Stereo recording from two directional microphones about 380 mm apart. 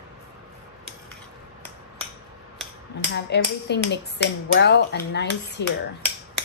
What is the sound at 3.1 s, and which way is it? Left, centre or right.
Speech, left.